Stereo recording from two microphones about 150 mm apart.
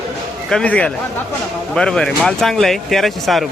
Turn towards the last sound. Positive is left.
turn(degrees=0)  # may be behind; listen again after turning